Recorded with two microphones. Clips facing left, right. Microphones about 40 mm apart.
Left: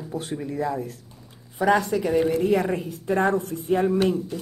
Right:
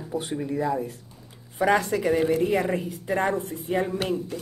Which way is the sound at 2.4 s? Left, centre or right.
Right.